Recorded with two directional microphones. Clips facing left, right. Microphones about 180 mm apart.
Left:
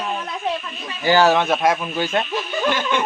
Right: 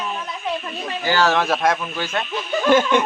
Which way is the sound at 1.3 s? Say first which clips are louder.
Left 1 dB; centre (ahead or behind).